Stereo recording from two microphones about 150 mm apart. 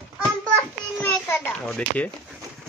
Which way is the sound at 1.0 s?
15° left (ahead or behind).